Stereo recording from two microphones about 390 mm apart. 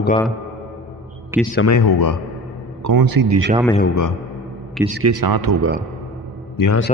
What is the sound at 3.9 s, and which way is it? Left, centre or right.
Speech, left.